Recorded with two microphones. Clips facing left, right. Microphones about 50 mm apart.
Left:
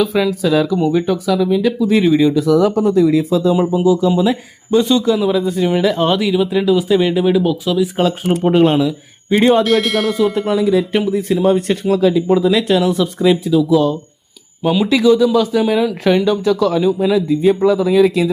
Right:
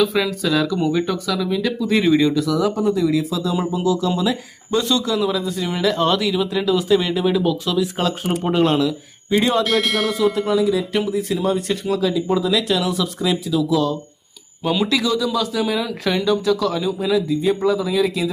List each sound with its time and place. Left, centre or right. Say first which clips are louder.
0.0 s speech: left 4 dB; centre
2.5 s speech: left 6 dB; left; by 9.4 s centre
9.6 s speech: left 4 dB; centre
10.5 s speech: left 4 dB; left
14.6 s speech: left 5 dB; centre
14.8 s speech: left 8 dB; left
15.6 s speech: left 7 dB; centre